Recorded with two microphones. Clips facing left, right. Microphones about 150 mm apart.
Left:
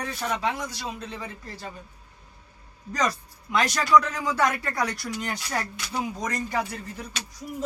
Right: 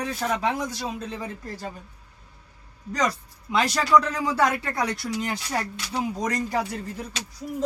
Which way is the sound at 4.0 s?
30° right (ahead or behind).